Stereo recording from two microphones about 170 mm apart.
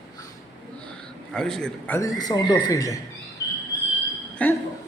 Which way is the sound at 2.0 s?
20° left (ahead or behind).